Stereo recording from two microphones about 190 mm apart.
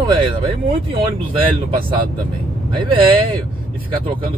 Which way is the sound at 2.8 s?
25° right (ahead or behind).